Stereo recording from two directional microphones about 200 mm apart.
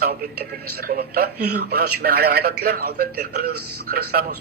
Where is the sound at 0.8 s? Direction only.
50° right (ahead or behind).